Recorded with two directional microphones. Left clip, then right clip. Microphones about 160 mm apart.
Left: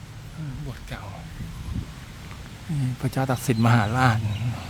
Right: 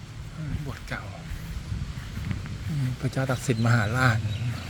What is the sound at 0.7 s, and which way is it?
Speech, 5° left (ahead or behind).